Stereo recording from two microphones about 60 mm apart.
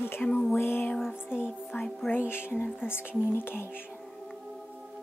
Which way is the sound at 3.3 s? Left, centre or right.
Left.